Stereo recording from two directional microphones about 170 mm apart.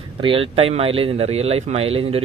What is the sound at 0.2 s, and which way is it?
Speech, 35° right (ahead or behind).